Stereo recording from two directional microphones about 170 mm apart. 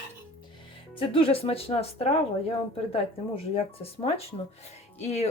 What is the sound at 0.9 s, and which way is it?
Speech, 35° left (ahead or behind).